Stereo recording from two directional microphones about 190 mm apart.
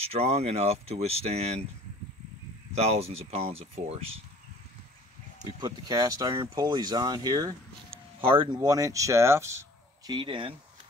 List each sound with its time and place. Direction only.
0.0 s speech: 35° right (ahead or behind)
2.7 s speech: 35° right (ahead or behind)
5.4 s speech: 20° right (ahead or behind)